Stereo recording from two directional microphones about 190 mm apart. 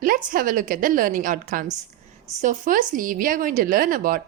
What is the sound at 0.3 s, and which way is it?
A woman's voice, 45° right (ahead or behind).